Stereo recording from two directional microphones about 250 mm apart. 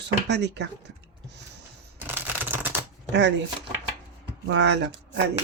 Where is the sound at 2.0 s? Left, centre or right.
Centre.